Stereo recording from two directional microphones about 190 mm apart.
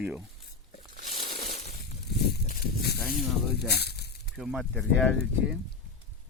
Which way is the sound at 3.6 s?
60° left (ahead or behind).